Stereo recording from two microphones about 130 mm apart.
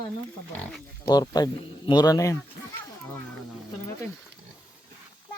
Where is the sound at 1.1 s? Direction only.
30° left (ahead or behind).